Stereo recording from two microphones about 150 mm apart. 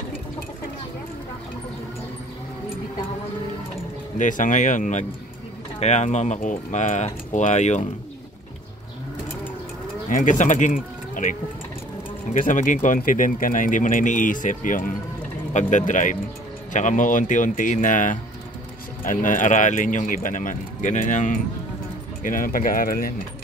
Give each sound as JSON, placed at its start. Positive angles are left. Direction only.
{"t": 4.2, "sound": "speech", "side_deg": 60}
{"t": 10.0, "sound": "speech", "side_deg": 55}
{"t": 12.4, "sound": "speech", "side_deg": 60}
{"t": 22.2, "sound": "speech", "side_deg": 65}